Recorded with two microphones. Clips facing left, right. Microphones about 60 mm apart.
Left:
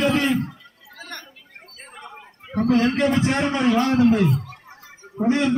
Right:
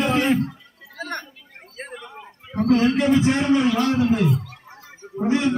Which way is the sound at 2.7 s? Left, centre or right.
Left.